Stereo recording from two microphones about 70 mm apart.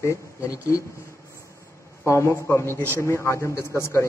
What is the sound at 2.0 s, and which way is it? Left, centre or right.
A man's voice, left.